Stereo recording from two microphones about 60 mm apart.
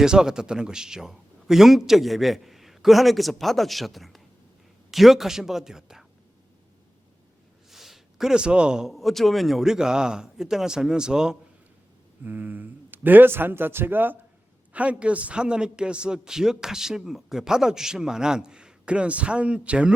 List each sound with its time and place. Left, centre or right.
0.0 s a man's voice: centre
7.7 s a sound: centre
8.9 s a man's voice: centre
12.2 s a man's voice: right
14.7 s a man's voice: right